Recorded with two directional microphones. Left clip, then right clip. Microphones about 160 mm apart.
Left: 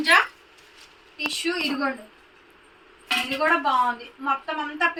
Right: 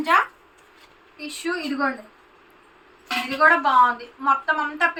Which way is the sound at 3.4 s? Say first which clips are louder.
Right 6 dB; 5° right (ahead or behind).